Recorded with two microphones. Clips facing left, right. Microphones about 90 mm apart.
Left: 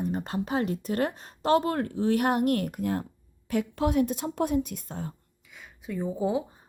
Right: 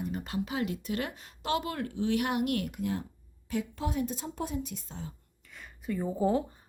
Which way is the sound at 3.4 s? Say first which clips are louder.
Left 7 dB; 60° left (ahead or behind).